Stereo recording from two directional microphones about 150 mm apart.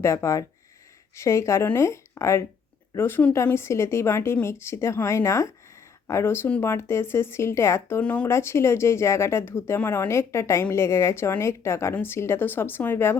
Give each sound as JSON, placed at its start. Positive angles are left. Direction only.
{"t": 0.0, "sound": "a woman's voice", "side_deg": 20}